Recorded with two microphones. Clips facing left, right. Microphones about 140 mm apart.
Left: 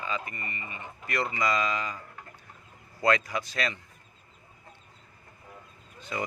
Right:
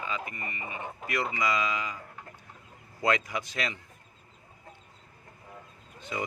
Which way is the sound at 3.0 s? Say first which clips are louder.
Left 2 dB; 20° right (ahead or behind).